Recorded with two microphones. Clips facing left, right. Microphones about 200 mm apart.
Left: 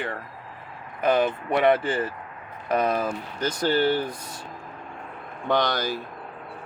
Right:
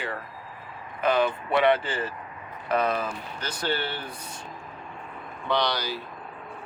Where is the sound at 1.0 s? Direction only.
45° left (ahead or behind).